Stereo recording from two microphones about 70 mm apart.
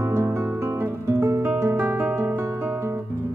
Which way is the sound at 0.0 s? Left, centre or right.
Right.